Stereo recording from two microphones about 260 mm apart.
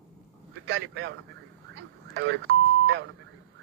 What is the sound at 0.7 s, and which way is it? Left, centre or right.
Speech, right.